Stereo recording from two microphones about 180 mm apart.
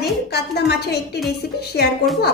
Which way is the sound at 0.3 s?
65° left (ahead or behind).